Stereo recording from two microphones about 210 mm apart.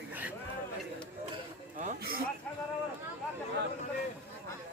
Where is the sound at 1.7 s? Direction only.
40° right (ahead or behind).